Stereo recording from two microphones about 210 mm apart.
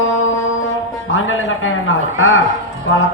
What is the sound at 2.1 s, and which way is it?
Speech, 75° left (ahead or behind).